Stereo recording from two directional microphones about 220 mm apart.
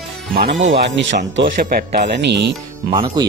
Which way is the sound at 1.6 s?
35° right (ahead or behind).